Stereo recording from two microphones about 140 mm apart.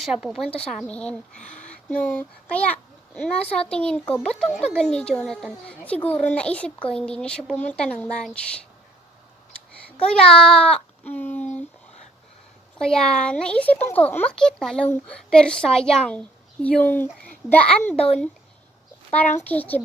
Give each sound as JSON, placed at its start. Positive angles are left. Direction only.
{"t": 0.0, "sound": "a woman's voice", "side_deg": -5}
{"t": 10.0, "sound": "speech", "side_deg": 5}
{"t": 12.8, "sound": "a child's voice", "side_deg": 5}
{"t": 17.9, "sound": "speech", "side_deg": 45}
{"t": 19.5, "sound": "a child's voice", "side_deg": 10}